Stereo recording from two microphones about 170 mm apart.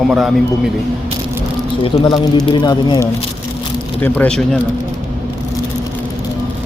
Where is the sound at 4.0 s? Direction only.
10° left (ahead or behind).